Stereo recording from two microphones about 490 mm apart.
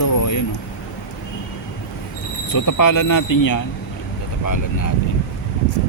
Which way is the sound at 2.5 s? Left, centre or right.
Left.